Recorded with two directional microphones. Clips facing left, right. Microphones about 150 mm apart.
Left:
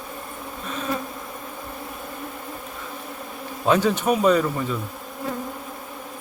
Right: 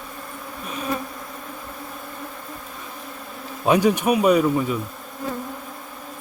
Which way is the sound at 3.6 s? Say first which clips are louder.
Right 2 dB; 15° right (ahead or behind).